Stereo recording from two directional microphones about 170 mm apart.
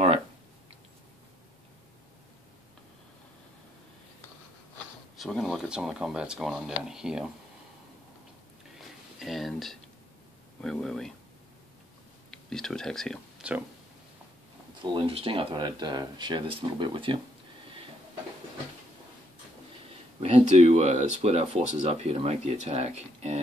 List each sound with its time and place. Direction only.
5.1 s speech: centre (ahead or behind)
9.2 s a sound: centre (ahead or behind)
10.6 s speech: 5° left (ahead or behind)
12.3 s speech: 5° left (ahead or behind)
14.8 s speech: 30° right (ahead or behind)
20.2 s speech: 40° right (ahead or behind)